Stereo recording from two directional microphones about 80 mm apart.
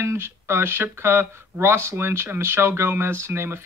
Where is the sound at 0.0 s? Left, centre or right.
Right.